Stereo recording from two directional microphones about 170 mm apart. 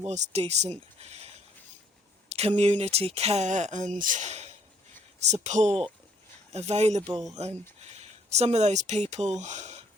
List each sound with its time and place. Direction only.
0.1 s speech: 40° right (ahead or behind)
0.9 s a sound: 40° right (ahead or behind)
2.3 s speech: 40° right (ahead or behind)